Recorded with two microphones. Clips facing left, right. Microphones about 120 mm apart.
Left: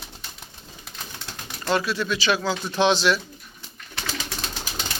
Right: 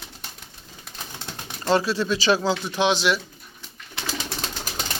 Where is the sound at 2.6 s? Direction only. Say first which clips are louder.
Left 5 dB; 10° right (ahead or behind).